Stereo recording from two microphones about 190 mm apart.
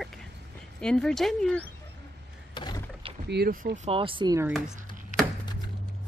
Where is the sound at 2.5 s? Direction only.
20° left (ahead or behind).